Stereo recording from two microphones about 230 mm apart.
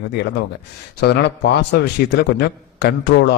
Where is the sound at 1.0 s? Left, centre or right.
Left.